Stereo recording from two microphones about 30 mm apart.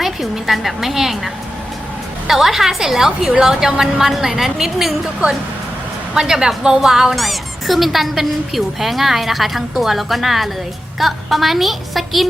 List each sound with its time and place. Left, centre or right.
0.0 s a woman's voice: centre
6.1 s a woman's voice: centre
7.2 s speech: centre